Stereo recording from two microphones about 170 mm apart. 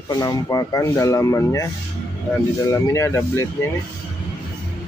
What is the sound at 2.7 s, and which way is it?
Speech, 15° left (ahead or behind).